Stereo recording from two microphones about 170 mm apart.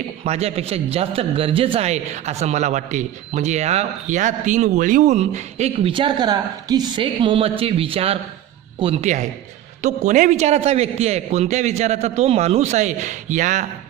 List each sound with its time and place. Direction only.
0.3 s a man's voice: 40° right (ahead or behind)